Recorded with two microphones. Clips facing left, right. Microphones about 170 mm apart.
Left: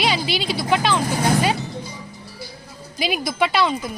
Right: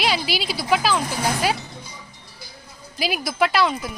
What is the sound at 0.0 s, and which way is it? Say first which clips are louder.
A woman's voice: left 2 dB; 5° right (ahead or behind).